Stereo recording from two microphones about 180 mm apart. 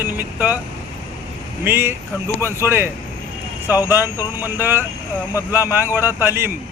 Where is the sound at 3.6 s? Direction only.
15° left (ahead or behind).